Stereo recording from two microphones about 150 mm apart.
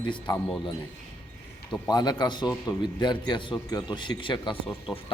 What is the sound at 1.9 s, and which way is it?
A man's voice, 30° left (ahead or behind).